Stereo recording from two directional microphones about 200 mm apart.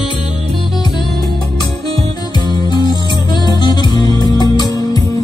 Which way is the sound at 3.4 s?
20° left (ahead or behind).